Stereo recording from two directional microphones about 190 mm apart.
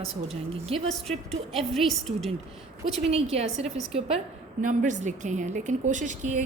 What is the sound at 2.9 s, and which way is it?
A woman's voice, 35° right (ahead or behind).